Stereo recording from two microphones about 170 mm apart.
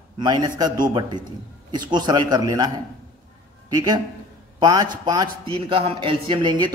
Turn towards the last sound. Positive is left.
turn(degrees=-25)  # may be behind; listen again after turning